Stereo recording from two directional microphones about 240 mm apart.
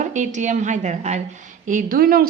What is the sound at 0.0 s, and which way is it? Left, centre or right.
A woman's voice, right.